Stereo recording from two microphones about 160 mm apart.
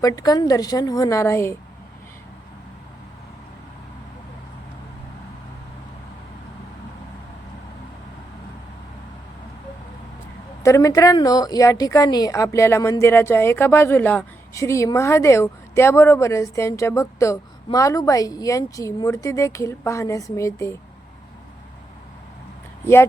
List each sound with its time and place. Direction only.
0.0 s a woman's voice: 25° left (ahead or behind)
10.6 s a woman's voice: 20° left (ahead or behind)
22.8 s speech: 15° left (ahead or behind)